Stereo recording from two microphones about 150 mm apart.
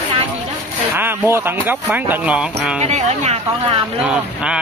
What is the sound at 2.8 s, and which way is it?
Speech, 45° right (ahead or behind).